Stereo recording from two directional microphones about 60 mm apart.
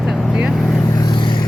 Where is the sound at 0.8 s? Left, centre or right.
Left.